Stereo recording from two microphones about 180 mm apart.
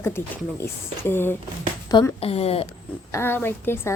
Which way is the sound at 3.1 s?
10° left (ahead or behind).